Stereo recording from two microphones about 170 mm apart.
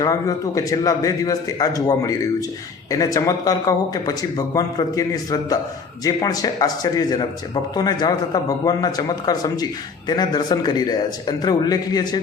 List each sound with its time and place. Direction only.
0.0 s speech: 20° left (ahead or behind)